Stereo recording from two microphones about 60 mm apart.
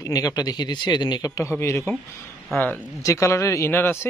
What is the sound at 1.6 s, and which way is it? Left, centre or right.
Speech, left.